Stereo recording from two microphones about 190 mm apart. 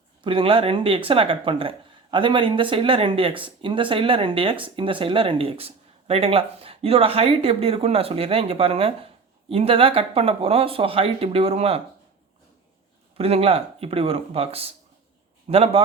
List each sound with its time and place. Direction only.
0.2 s speech: 25° right (ahead or behind)
13.1 s speech: 30° right (ahead or behind)